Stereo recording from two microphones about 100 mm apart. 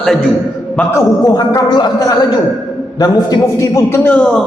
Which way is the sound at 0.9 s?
40° left (ahead or behind).